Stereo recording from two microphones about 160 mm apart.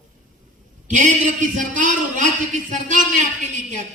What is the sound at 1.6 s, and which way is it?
Speech, 55° right (ahead or behind).